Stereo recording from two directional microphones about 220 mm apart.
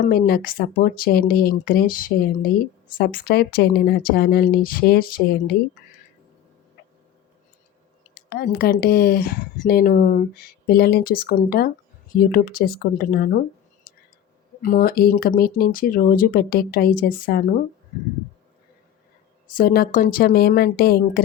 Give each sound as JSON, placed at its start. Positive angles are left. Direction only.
{"t": 0.0, "sound": "speech", "side_deg": 45}
{"t": 8.1, "sound": "speech", "side_deg": 45}
{"t": 13.9, "sound": "whispering", "side_deg": 40}
{"t": 14.6, "sound": "speech", "side_deg": 40}
{"t": 19.5, "sound": "speech", "side_deg": 45}